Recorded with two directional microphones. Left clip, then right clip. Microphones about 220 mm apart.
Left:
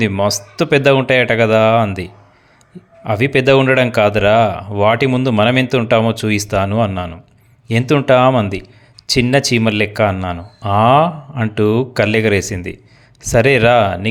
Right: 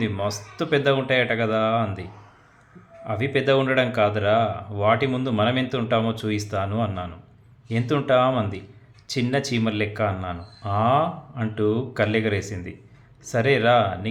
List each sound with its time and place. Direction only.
0.0 s speech: 40° left (ahead or behind)